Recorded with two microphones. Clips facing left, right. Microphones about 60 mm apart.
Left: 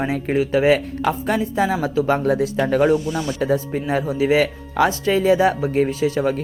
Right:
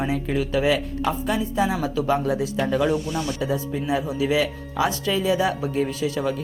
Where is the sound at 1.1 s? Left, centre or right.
Left.